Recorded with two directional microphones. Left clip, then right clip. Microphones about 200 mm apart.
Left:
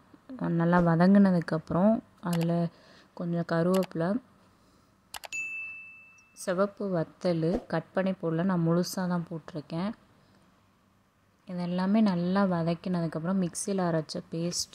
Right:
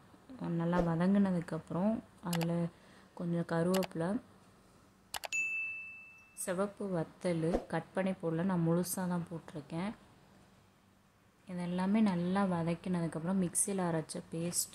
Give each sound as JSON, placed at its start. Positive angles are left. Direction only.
{"t": 0.4, "sound": "speech", "side_deg": 30}
{"t": 5.1, "sound": "ding", "side_deg": 0}
{"t": 6.4, "sound": "speech", "side_deg": 25}
{"t": 11.4, "sound": "speech", "side_deg": 25}